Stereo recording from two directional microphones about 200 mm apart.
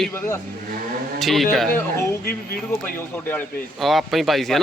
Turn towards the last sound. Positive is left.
turn(degrees=0)  # may be behind; listen again after turning